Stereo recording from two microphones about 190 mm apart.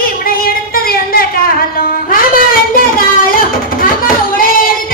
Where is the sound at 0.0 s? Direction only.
50° left (ahead or behind).